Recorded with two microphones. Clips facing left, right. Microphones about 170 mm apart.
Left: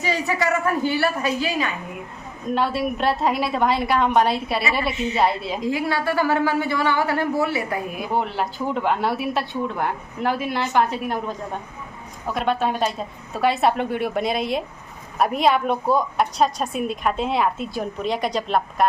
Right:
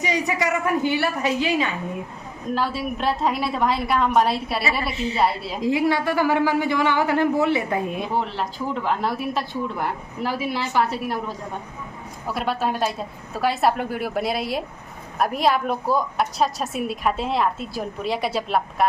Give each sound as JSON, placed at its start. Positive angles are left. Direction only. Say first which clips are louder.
{"t": 0.0, "sound": "a woman's voice", "louder": "even", "side_deg": -20}
{"t": 2.6, "sound": "a woman's voice", "louder": "left 3 dB", "side_deg": 0}
{"t": 5.6, "sound": "a woman's voice", "louder": "right 3 dB", "side_deg": -20}
{"t": 8.4, "sound": "a woman's voice", "louder": "left 2 dB", "side_deg": 0}
{"t": 10.8, "sound": "a woman's voice", "louder": "left 2 dB", "side_deg": -5}
{"t": 12.3, "sound": "a woman's voice", "louder": "left 2 dB", "side_deg": -5}